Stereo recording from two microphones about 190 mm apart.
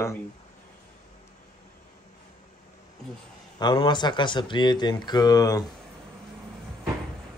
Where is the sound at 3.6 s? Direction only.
25° left (ahead or behind).